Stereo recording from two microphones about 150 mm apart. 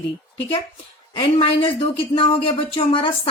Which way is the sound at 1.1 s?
30° left (ahead or behind).